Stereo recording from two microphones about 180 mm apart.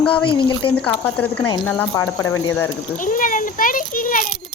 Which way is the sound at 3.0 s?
50° left (ahead or behind).